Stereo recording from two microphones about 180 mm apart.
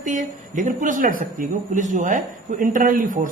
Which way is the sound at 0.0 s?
45° right (ahead or behind).